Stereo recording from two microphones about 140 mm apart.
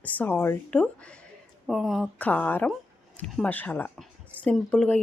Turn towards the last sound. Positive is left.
turn(degrees=5)  # may be behind; listen again after turning